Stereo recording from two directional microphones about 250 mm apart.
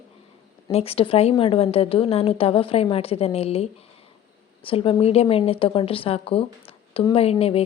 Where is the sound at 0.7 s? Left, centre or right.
Left.